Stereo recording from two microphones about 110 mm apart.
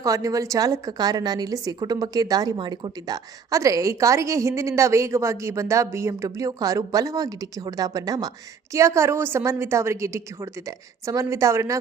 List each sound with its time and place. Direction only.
0.0 s a woman's voice: 30° right (ahead or behind)